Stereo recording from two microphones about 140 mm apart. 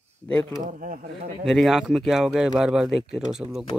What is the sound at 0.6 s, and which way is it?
Speech, 70° right (ahead or behind).